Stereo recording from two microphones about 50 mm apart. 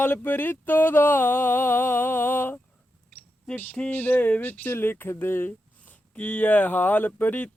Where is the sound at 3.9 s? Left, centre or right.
Left.